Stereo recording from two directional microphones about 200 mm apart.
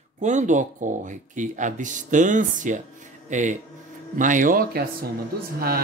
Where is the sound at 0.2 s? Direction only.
35° right (ahead or behind).